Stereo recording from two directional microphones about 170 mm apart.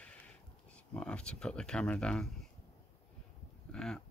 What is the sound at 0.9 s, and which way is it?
Speech, 5° left (ahead or behind).